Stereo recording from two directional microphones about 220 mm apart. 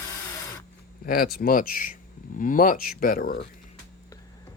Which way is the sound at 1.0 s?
45° left (ahead or behind).